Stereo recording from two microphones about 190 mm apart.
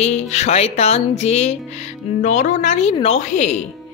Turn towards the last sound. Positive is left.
turn(degrees=40)  # may be behind; listen again after turning